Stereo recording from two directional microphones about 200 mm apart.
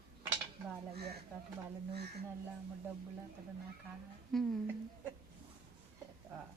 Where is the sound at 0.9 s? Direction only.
55° right (ahead or behind).